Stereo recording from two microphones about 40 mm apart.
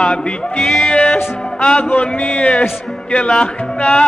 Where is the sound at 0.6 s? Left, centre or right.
Centre.